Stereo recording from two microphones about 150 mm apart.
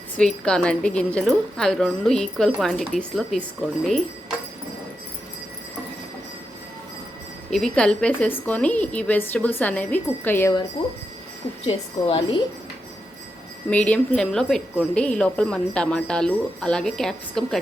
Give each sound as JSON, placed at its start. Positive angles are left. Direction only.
{"t": 0.2, "sound": "speech", "side_deg": 5}
{"t": 7.5, "sound": "speech", "side_deg": 5}
{"t": 11.6, "sound": "a woman's voice", "side_deg": 40}
{"t": 13.7, "sound": "speech", "side_deg": 10}